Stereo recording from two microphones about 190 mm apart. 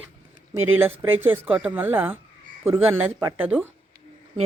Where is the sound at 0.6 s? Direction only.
10° right (ahead or behind).